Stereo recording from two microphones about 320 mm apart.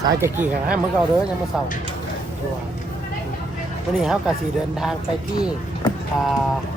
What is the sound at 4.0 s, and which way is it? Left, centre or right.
Speech, centre.